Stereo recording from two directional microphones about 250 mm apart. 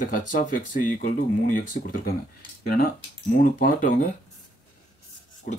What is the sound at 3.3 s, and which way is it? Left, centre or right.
Speech, left.